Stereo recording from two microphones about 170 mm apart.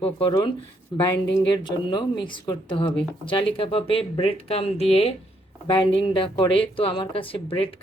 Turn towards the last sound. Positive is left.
turn(degrees=35)  # may be behind; listen again after turning